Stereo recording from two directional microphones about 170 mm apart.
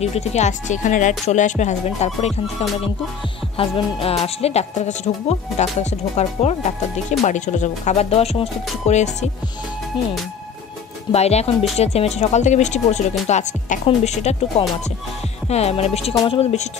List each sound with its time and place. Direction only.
0.0 s speech: 40° left (ahead or behind)
3.5 s speech: 35° left (ahead or behind)
11.1 s speech: 40° left (ahead or behind)